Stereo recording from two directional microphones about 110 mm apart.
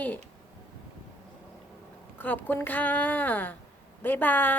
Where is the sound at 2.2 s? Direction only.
15° left (ahead or behind).